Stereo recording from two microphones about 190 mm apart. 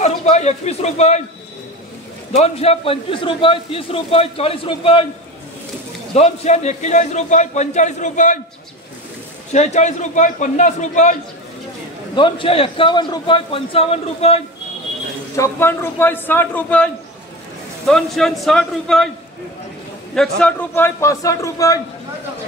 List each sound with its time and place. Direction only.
0.0 s a man's voice: 35° left (ahead or behind)
2.3 s a man's voice: 35° left (ahead or behind)
6.1 s a man's voice: 35° left (ahead or behind)
9.5 s a man's voice: 40° left (ahead or behind)
12.2 s a man's voice: 25° left (ahead or behind)
15.3 s a man's voice: 15° left (ahead or behind)
20.2 s a man's voice: 5° left (ahead or behind)